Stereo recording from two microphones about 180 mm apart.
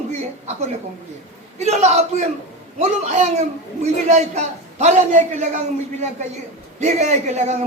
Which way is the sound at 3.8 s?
40° right (ahead or behind).